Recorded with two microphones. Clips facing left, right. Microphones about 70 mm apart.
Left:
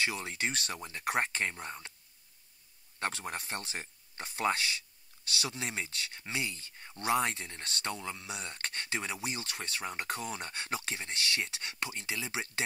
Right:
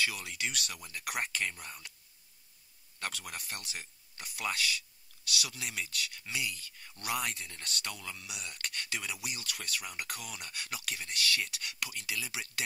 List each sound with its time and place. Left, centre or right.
0.0 s speech: left
3.0 s speech: left